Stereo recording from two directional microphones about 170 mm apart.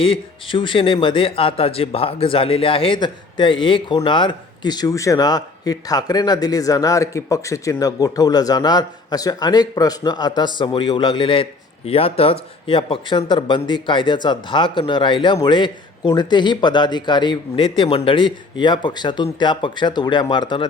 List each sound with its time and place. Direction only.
0.0 s a man's voice: 30° left (ahead or behind)